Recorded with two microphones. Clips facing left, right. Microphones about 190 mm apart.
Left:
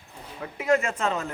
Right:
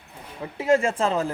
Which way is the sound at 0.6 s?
30° right (ahead or behind).